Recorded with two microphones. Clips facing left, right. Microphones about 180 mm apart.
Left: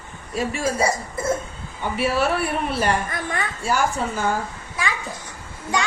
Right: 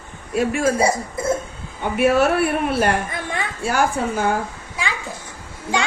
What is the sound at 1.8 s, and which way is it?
A man's voice, 55° right (ahead or behind).